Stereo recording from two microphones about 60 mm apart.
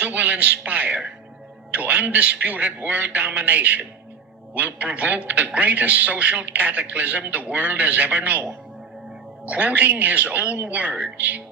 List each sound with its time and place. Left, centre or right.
0.0 s a sound: right
1.7 s a man's voice: right
9.5 s a man's voice: right